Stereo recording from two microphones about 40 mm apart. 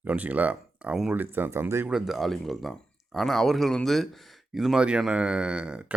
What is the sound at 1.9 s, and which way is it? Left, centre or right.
Speech, centre.